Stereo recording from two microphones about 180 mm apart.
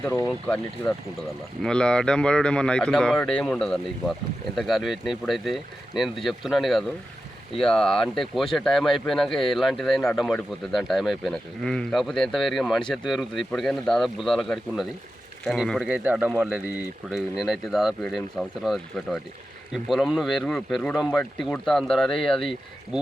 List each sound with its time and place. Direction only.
0.0 s speech: 10° left (ahead or behind)